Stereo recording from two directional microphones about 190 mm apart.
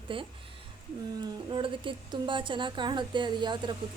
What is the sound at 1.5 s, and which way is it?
A woman's voice, 25° right (ahead or behind).